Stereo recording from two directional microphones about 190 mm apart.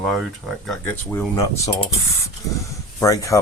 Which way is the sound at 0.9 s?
10° left (ahead or behind).